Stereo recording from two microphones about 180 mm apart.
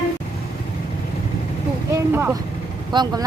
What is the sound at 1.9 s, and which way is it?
Vehicle, 10° right (ahead or behind).